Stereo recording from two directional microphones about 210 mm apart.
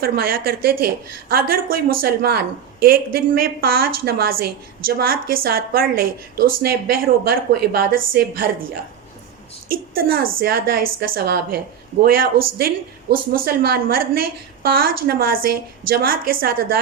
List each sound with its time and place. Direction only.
0.0 s speech: 45° right (ahead or behind)